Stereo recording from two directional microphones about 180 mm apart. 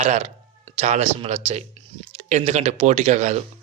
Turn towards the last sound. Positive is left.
turn(degrees=-40)  # may be behind; listen again after turning